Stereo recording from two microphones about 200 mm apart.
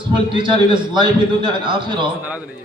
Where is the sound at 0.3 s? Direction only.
25° right (ahead or behind).